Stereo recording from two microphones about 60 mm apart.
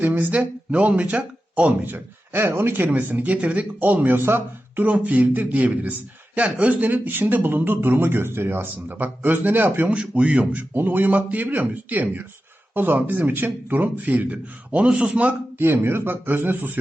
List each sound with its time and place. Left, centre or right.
0.0 s speech: right
1.9 s speech: right
4.2 s speech: right
4.8 s speech: right
9.9 s speech: centre
15.5 s speech: right